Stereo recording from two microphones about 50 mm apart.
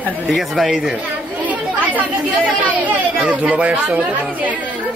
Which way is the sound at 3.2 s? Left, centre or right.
Right.